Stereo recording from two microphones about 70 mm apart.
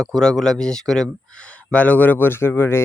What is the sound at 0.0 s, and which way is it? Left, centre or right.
Speech, centre.